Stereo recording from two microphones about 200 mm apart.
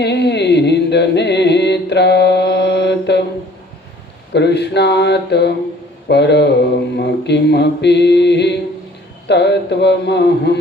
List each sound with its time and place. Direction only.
0.0 s music: 60° left (ahead or behind)
4.4 s mantra: 60° left (ahead or behind)